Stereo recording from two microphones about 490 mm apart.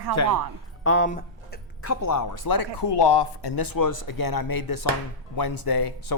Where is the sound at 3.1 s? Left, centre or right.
Left.